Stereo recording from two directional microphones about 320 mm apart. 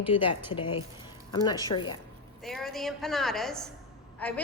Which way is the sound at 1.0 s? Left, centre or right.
Centre.